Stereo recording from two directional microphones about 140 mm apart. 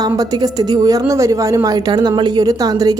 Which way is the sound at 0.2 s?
25° right (ahead or behind).